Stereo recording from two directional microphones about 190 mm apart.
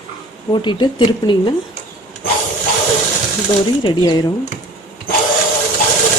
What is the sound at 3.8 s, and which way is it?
Speech, 20° left (ahead or behind).